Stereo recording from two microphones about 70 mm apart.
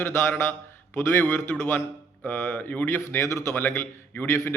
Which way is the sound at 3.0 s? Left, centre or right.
Left.